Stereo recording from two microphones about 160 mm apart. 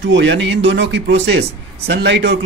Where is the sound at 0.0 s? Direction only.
90° right.